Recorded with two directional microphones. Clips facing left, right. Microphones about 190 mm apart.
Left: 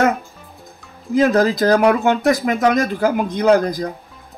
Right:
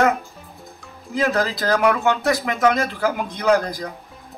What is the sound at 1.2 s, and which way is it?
Speech, 35° left (ahead or behind).